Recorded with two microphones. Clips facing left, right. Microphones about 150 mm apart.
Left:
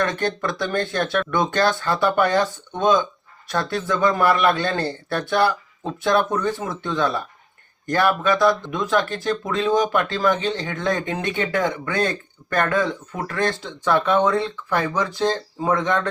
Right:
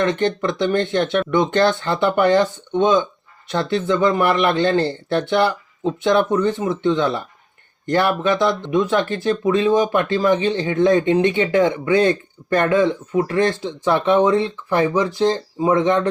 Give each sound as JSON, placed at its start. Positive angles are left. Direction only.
{"t": 0.0, "sound": "speech", "side_deg": -20}